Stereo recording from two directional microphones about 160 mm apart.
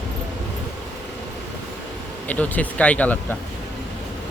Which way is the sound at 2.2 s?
10° left (ahead or behind).